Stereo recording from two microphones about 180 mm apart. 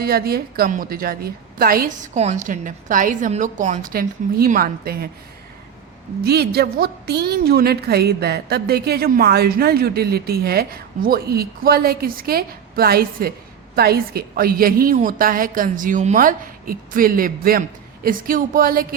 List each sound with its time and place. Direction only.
0.0 s a woman's voice: 60° right (ahead or behind)
6.2 s a woman's voice: 65° right (ahead or behind)